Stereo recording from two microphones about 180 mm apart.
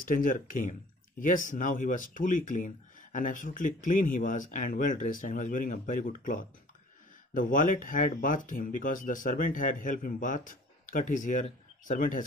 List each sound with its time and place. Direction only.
0.0 s speech: 50° left (ahead or behind)